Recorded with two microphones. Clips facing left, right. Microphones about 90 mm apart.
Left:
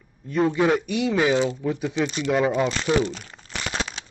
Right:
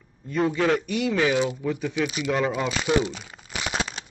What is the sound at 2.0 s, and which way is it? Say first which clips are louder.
Speech: left 2 dB; 10° right (ahead or behind).